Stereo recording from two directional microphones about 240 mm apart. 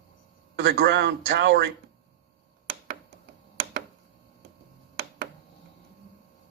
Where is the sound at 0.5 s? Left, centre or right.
Right.